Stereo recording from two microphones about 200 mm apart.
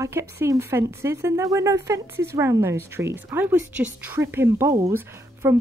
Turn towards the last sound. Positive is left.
turn(degrees=-10)  # may be behind; listen again after turning